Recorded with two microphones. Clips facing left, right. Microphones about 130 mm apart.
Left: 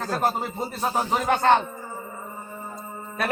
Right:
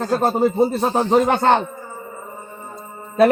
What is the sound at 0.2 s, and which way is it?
A man's voice, 25° right (ahead or behind).